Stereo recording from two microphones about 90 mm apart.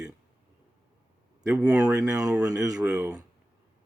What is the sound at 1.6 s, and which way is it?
Speech, 40° right (ahead or behind).